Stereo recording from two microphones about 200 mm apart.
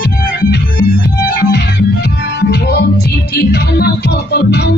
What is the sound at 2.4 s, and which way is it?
Music, 55° left (ahead or behind).